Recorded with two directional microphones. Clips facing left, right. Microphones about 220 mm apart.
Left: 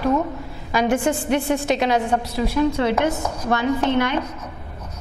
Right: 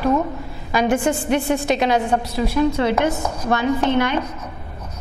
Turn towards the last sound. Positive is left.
turn(degrees=-15)  # may be behind; listen again after turning